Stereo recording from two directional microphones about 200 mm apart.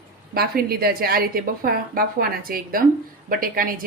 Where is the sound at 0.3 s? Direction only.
50° right (ahead or behind).